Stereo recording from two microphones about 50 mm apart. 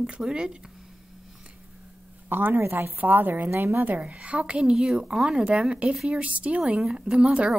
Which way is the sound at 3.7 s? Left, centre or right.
Right.